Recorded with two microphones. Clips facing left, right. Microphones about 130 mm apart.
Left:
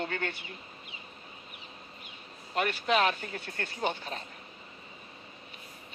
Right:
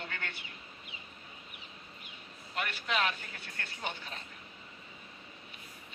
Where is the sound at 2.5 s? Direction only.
40° left (ahead or behind).